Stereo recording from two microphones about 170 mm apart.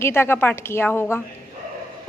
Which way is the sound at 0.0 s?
15° left (ahead or behind).